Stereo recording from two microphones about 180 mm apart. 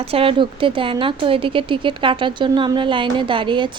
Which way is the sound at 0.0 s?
30° right (ahead or behind).